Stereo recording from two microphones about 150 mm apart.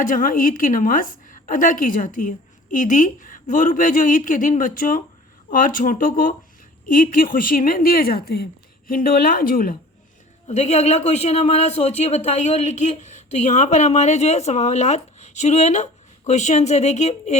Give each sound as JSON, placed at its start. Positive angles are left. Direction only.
{"t": 0.0, "sound": "a woman's voice", "side_deg": 65}
{"t": 8.9, "sound": "a woman's voice", "side_deg": 70}
{"t": 10.5, "sound": "speech", "side_deg": 45}